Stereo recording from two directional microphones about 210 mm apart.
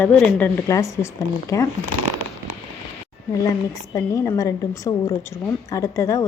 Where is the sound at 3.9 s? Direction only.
15° left (ahead or behind).